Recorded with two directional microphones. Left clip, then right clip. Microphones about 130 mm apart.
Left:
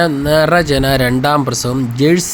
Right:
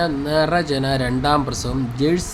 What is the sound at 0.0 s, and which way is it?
Speech, 45° left (ahead or behind).